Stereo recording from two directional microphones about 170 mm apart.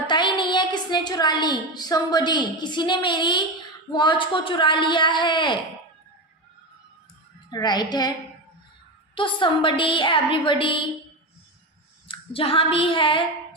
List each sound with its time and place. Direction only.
0.1 s a woman's voice: 25° left (ahead or behind)
7.5 s speech: 25° left (ahead or behind)
9.1 s speech: 30° left (ahead or behind)
12.0 s a sound: 35° left (ahead or behind)